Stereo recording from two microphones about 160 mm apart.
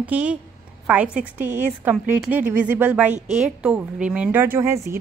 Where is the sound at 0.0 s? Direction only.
10° right (ahead or behind).